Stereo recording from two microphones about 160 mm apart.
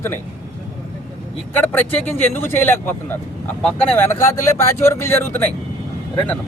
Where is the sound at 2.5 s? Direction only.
15° left (ahead or behind).